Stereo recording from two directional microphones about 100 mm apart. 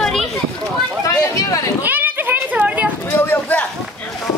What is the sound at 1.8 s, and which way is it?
Children playing, 20° right (ahead or behind).